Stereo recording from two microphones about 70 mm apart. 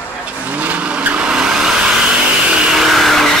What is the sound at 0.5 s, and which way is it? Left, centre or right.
Vehicle, right.